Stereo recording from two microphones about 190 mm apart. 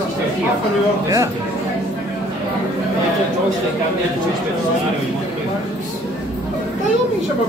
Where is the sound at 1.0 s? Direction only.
20° right (ahead or behind).